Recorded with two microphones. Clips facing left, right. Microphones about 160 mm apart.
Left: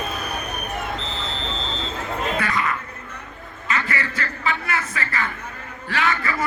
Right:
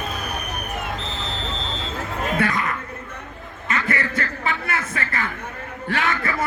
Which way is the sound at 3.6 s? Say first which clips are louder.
Right 1 dB; 50° right (ahead or behind).